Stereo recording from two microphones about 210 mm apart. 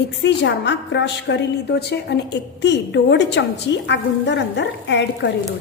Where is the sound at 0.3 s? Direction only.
55° left (ahead or behind).